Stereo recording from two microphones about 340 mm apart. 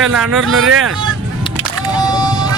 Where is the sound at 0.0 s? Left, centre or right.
Centre.